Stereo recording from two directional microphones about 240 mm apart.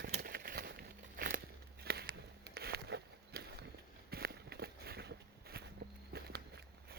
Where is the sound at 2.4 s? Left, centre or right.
Right.